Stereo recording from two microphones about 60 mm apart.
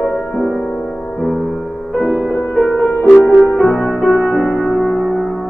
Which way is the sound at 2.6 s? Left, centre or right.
Centre.